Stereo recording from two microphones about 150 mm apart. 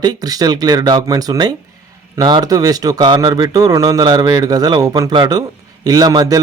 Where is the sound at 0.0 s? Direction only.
25° right (ahead or behind).